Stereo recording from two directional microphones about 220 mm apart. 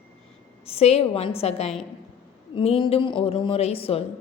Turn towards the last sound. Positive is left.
turn(degrees=25)  # may be behind; listen again after turning